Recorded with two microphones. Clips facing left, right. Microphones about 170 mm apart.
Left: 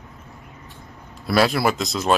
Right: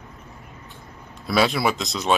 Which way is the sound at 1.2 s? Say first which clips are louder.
Left 2 dB; centre (ahead or behind).